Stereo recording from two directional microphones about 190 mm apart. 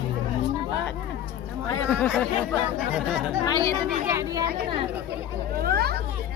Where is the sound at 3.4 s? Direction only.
20° left (ahead or behind).